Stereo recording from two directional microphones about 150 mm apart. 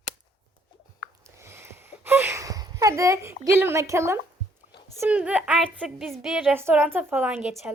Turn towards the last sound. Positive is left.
turn(degrees=-10)  # may be behind; listen again after turning